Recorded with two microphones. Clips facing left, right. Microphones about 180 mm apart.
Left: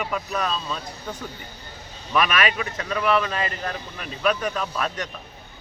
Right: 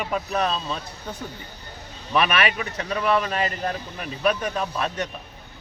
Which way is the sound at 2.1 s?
30° right (ahead or behind).